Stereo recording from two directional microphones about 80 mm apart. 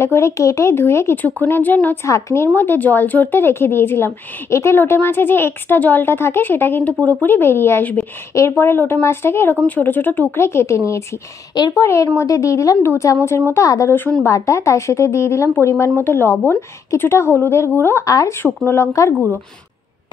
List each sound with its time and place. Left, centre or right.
0.0 s a woman's voice: left
1.1 s speech: left
2.0 s a woman's voice: left
18.0 s speech: left
18.7 s a woman's voice: left